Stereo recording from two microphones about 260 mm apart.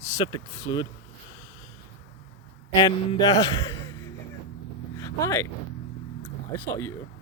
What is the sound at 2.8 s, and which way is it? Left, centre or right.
Speech, centre.